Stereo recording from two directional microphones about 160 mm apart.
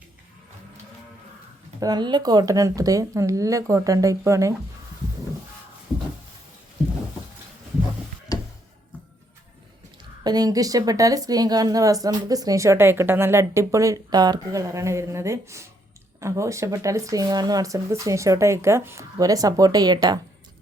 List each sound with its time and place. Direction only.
1.8 s a woman's voice: 25° right (ahead or behind)
8.3 s a sound: 25° left (ahead or behind)
10.2 s a woman's voice: 25° right (ahead or behind)